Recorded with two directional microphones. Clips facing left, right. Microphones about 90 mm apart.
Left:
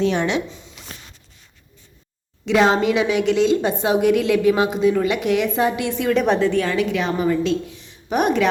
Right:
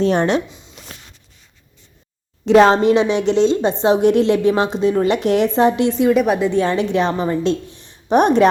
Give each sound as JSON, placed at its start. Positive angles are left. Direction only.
{"t": 0.0, "sound": "a woman's voice", "side_deg": -40}
{"t": 0.4, "sound": "speech", "side_deg": -20}
{"t": 2.5, "sound": "a woman's voice", "side_deg": -40}
{"t": 6.1, "sound": "a woman's voice", "side_deg": -10}
{"t": 6.5, "sound": "a woman's voice", "side_deg": -25}